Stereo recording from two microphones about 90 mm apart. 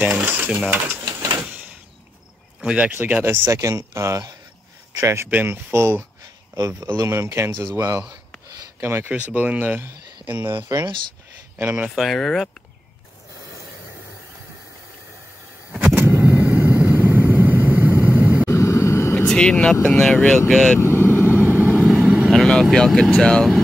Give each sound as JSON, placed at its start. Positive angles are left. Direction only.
{"t": 0.0, "sound": "speech", "side_deg": -20}
{"t": 2.6, "sound": "speech", "side_deg": -15}
{"t": 3.4, "sound": "speech", "side_deg": -35}
{"t": 11.9, "sound": "speech", "side_deg": 0}
{"t": 15.9, "sound": "vehicle", "side_deg": -20}
{"t": 18.5, "sound": "vehicle", "side_deg": 30}
{"t": 19.1, "sound": "speech", "side_deg": 10}
{"t": 20.8, "sound": "vehicle", "side_deg": 25}
{"t": 21.5, "sound": "vehicle", "side_deg": -20}
{"t": 21.7, "sound": "vehicle", "side_deg": -5}
{"t": 23.2, "sound": "speech", "side_deg": 5}